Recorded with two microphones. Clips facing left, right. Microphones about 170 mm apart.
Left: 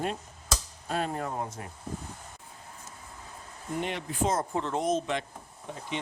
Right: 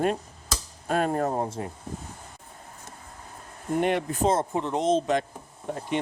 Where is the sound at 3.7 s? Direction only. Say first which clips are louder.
Right 8 dB; 55° right (ahead or behind).